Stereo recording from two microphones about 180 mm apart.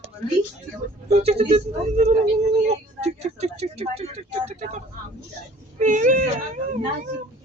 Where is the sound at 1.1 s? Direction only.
35° right (ahead or behind).